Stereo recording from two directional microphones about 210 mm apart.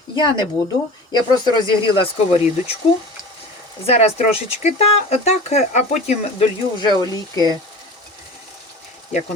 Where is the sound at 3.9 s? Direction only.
30° left (ahead or behind).